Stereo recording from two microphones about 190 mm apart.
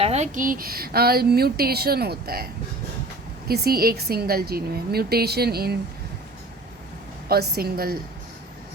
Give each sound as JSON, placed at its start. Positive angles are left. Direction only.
{"t": 0.0, "sound": "a woman's voice", "side_deg": -35}
{"t": 7.3, "sound": "speech", "side_deg": -55}